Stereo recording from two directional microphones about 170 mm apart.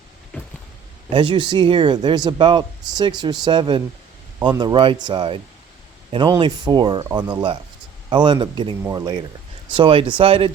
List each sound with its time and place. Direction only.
1.1 s a man's voice: 30° right (ahead or behind)
9.7 s speech: 30° right (ahead or behind)